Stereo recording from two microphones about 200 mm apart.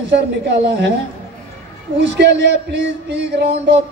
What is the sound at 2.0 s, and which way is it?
Speech, 60° right (ahead or behind).